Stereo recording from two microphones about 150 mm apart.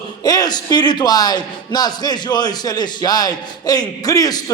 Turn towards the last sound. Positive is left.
turn(degrees=25)  # may be behind; listen again after turning